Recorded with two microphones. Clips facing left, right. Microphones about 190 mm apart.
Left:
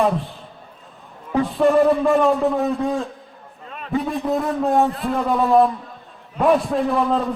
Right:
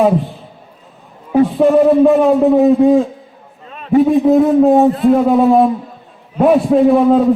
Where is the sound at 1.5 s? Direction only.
Centre (ahead or behind).